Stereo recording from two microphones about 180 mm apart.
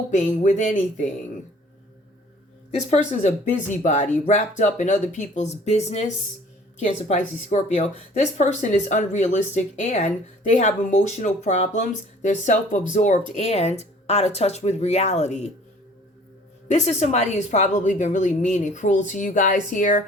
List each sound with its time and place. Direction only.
0.1 s speech: 40° left (ahead or behind)
3.1 s speech: 40° left (ahead or behind)
16.6 s a woman's voice: 40° left (ahead or behind)